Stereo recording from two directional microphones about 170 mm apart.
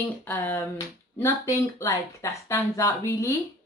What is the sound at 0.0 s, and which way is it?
Speech, 10° left (ahead or behind).